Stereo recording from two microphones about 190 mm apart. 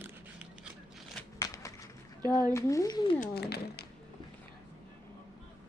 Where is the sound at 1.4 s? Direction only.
15° left (ahead or behind).